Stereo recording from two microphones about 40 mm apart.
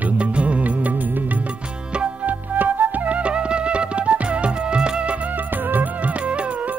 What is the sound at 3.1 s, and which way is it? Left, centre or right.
Music, right.